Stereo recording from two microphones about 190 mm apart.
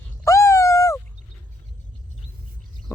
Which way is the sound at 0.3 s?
15° left (ahead or behind).